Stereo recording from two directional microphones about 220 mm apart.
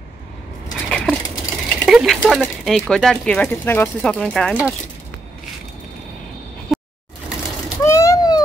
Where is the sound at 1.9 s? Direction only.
Centre (ahead or behind).